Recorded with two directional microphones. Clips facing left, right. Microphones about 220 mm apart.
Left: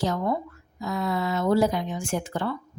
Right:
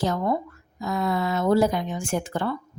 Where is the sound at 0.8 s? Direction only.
50° right (ahead or behind).